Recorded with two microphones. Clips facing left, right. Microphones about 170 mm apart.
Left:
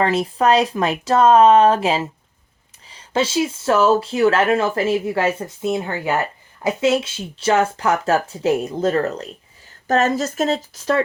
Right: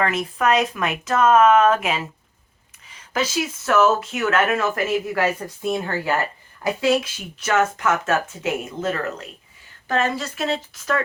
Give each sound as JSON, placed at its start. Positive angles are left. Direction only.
{"t": 0.0, "sound": "speech", "side_deg": 30}